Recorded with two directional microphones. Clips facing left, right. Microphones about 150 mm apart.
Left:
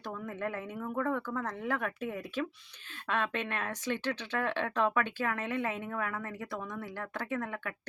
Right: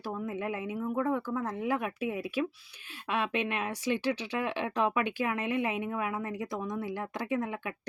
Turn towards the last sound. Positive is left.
turn(degrees=-15)  # may be behind; listen again after turning